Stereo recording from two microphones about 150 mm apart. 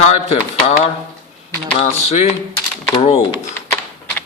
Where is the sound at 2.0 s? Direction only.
45° left (ahead or behind).